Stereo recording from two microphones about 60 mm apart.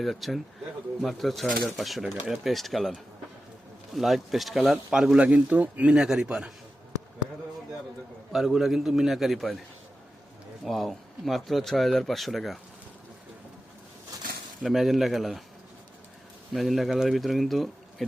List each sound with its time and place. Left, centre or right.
0.0 s speech: centre
4.9 s speech: centre
5.9 s speech: centre
8.3 s speech: centre
10.6 s speech: centre
14.6 s speech: centre
16.6 s speech: centre